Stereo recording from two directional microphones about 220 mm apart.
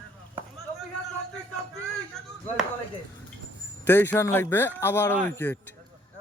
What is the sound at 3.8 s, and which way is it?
Speech, 10° left (ahead or behind).